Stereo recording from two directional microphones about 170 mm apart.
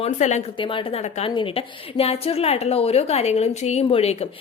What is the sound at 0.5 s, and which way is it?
A woman's voice, 30° left (ahead or behind).